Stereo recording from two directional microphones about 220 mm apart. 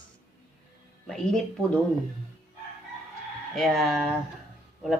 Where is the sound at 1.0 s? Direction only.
Centre (ahead or behind).